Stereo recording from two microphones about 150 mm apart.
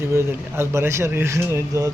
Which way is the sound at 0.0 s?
15° right (ahead or behind).